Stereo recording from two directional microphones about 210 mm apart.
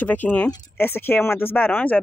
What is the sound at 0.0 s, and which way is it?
Speech, 10° left (ahead or behind).